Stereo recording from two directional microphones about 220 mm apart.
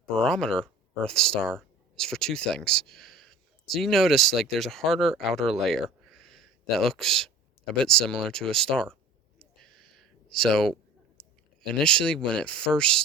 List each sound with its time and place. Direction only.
0.1 s speech: 5° left (ahead or behind)
5.6 s a sound: centre (ahead or behind)
7.7 s speech: 5° left (ahead or behind)
9.4 s a sound: centre (ahead or behind)
11.2 s clicking: 5° left (ahead or behind)
11.7 s speech: 5° left (ahead or behind)